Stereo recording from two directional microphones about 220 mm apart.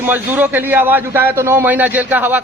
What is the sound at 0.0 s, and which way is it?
A man's voice, 10° right (ahead or behind).